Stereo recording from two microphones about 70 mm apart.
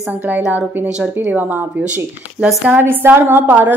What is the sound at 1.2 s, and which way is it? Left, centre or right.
A woman's voice, right.